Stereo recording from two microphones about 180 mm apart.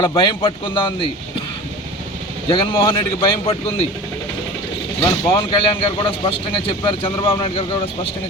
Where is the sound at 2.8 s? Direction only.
30° left (ahead or behind).